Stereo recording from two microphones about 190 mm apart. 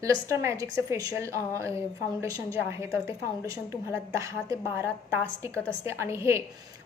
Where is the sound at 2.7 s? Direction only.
15° right (ahead or behind).